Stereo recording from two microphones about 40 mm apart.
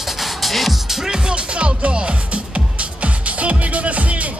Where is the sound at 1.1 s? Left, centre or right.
Right.